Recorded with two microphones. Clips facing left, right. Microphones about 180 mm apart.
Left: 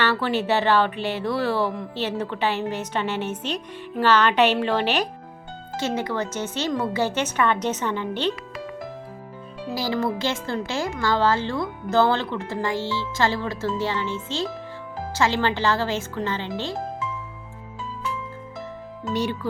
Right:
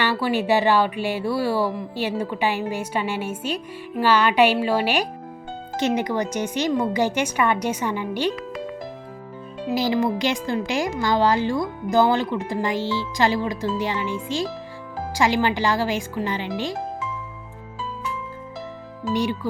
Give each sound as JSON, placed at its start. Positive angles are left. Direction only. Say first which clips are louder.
{"t": 0.0, "sound": "a woman's voice", "louder": "right 1 dB", "side_deg": -10}
{"t": 9.6, "sound": "a woman's voice", "louder": "right 4 dB", "side_deg": -20}
{"t": 19.1, "sound": "a woman's voice", "louder": "right 2 dB", "side_deg": -10}